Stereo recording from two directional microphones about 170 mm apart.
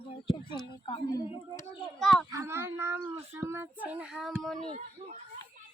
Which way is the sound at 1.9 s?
Centre (ahead or behind).